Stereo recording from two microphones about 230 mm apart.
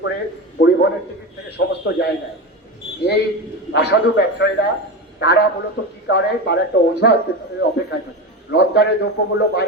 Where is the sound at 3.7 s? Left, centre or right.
Left.